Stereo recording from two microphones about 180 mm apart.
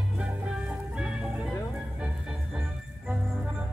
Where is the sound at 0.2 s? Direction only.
5° right (ahead or behind).